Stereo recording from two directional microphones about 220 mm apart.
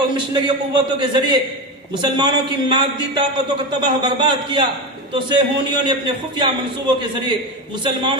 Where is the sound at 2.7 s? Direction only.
20° right (ahead or behind).